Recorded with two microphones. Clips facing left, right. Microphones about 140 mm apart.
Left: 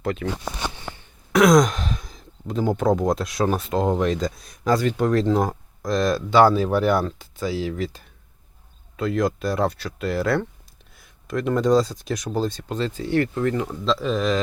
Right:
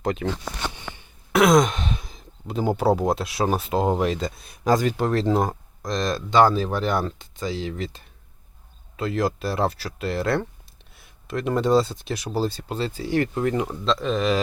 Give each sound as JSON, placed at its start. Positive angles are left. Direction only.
{"t": 0.0, "sound": "speech", "side_deg": -20}
{"t": 0.4, "sound": "a sound", "side_deg": 15}
{"t": 1.3, "sound": "sigh", "side_deg": 0}
{"t": 2.6, "sound": "speech", "side_deg": -10}
{"t": 13.8, "sound": "speech", "side_deg": 0}